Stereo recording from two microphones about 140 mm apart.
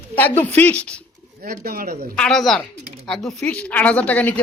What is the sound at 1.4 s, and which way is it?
Speech, 90° right.